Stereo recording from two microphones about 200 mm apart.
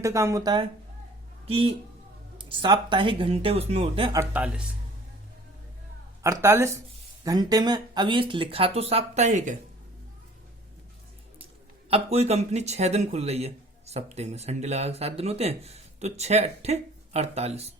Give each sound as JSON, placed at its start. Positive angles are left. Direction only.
{"t": 0.0, "sound": "speech", "side_deg": -15}
{"t": 4.2, "sound": "speech", "side_deg": -5}
{"t": 6.2, "sound": "speech", "side_deg": -15}
{"t": 11.9, "sound": "speech", "side_deg": -30}